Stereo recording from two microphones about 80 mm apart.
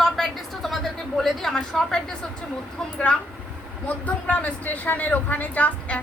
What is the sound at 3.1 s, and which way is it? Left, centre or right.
A woman's voice, centre.